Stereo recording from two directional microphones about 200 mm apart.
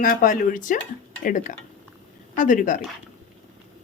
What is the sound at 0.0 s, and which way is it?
A woman's voice, 45° left (ahead or behind).